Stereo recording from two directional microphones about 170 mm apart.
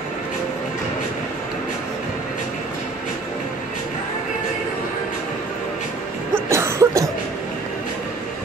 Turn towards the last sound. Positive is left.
turn(degrees=-15)  # may be behind; listen again after turning